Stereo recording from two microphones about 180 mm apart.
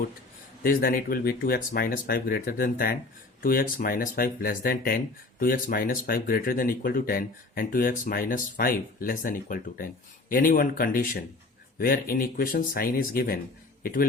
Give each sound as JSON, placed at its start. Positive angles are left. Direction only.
{"t": 0.6, "sound": "speech", "side_deg": 55}